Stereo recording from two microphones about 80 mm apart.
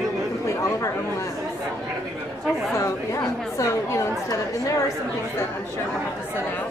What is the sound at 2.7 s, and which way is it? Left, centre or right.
Speech, left.